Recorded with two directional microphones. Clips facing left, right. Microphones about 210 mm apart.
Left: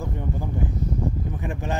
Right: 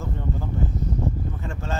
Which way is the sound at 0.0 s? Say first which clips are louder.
Left 1 dB; 15° left (ahead or behind).